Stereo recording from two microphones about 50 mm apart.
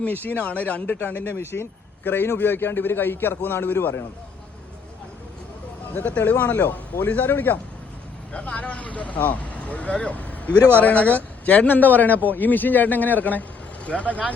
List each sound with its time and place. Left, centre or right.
0.0 s a man's voice: left
5.9 s a man's voice: left
8.3 s a man's voice: left